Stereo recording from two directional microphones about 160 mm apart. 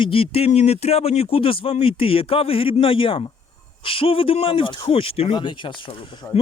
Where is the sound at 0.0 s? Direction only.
35° left (ahead or behind).